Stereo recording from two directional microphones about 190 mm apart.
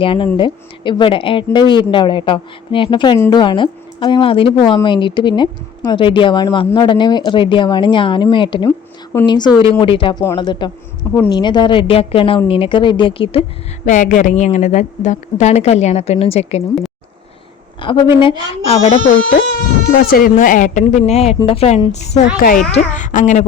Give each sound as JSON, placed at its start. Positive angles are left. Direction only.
{"t": 0.0, "sound": "a woman's voice", "side_deg": 25}
{"t": 13.8, "sound": "a woman's voice", "side_deg": 40}
{"t": 17.7, "sound": "a woman's voice", "side_deg": 25}
{"t": 19.9, "sound": "a woman's voice", "side_deg": 50}